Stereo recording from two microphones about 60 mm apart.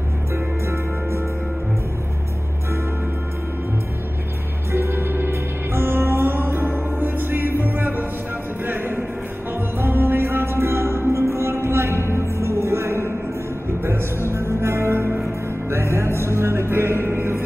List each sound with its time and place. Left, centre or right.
4.7 s music: right
17.1 s mantra: right